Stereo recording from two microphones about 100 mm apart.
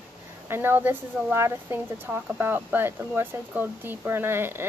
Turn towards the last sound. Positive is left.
turn(degrees=-25)  # may be behind; listen again after turning